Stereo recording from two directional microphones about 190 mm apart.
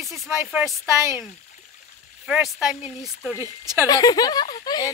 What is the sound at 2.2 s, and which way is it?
Speech, 5° right (ahead or behind).